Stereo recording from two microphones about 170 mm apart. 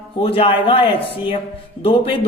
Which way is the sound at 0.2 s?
35° left (ahead or behind).